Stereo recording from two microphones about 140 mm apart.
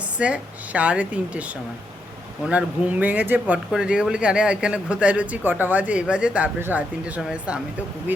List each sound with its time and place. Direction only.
0.2 s speech: 10° right (ahead or behind)
2.5 s speech: 10° right (ahead or behind)